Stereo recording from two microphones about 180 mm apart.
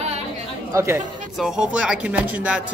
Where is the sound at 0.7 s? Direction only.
15° right (ahead or behind).